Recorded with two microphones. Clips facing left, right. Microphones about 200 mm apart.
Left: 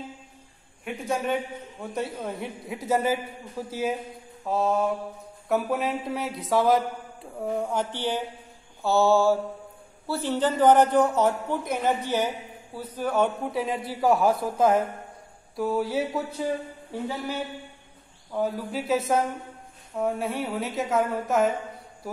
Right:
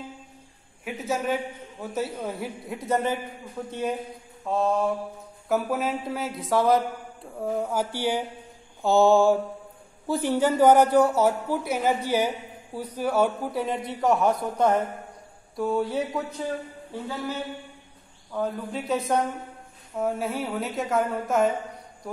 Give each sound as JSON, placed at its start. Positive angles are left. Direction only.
{"t": 0.8, "sound": "a man's voice", "side_deg": -5}
{"t": 18.3, "sound": "a man's voice", "side_deg": 5}